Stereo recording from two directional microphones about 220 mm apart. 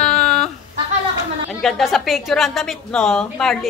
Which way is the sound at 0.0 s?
5° left (ahead or behind).